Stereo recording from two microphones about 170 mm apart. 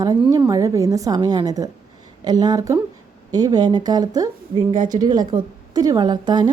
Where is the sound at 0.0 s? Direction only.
20° right (ahead or behind).